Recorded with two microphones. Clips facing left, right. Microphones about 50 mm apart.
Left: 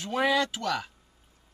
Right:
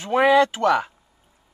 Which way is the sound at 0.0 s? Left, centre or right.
Right.